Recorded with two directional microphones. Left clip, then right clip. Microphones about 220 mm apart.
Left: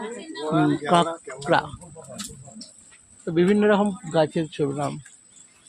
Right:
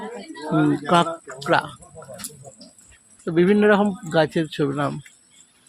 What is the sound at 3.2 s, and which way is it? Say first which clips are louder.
Speech: right 3 dB; 10° right (ahead or behind).